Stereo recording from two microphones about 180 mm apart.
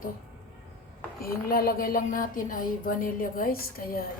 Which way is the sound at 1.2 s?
55° left (ahead or behind).